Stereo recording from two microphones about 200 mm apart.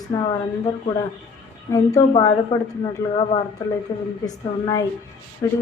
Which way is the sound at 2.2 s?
20° left (ahead or behind).